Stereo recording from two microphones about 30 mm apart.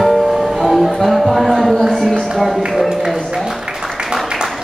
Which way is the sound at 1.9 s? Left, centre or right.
Centre.